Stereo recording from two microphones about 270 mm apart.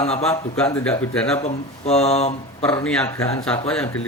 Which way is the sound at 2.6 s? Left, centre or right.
Centre.